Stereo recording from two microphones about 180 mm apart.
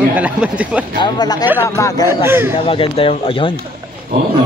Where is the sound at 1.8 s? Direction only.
15° left (ahead or behind).